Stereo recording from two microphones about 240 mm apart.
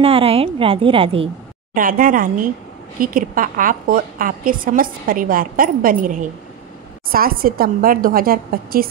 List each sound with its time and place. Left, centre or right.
0.0 s a woman's voice: right
1.8 s a woman's voice: right